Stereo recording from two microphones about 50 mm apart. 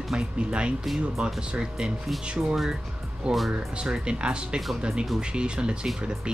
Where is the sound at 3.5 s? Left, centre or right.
Centre.